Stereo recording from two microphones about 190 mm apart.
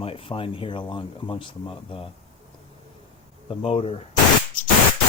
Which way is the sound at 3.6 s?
30° left (ahead or behind).